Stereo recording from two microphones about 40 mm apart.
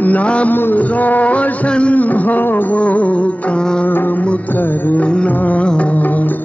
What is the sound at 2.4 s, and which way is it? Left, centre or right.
Music, left.